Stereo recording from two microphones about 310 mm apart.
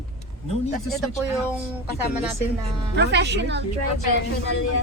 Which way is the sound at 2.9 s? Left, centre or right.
Right.